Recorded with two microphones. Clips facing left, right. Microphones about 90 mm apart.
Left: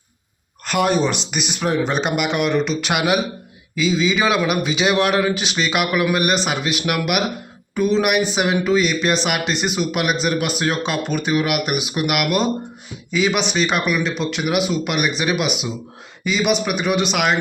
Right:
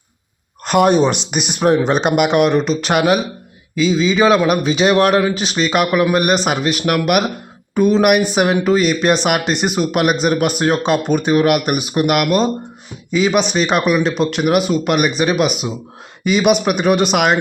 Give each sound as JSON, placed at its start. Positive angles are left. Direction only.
{"t": 0.9, "sound": "speech", "side_deg": -25}
{"t": 1.8, "sound": "a man's voice", "side_deg": -50}
{"t": 6.1, "sound": "speech", "side_deg": -45}
{"t": 16.2, "sound": "speech", "side_deg": -55}